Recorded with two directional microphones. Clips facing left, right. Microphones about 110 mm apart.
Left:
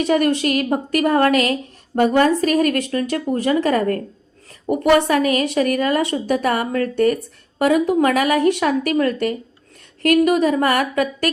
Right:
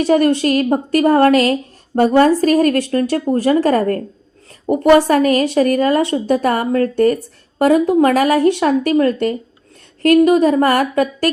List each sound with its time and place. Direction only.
0.0 s a woman's voice: 30° right (ahead or behind)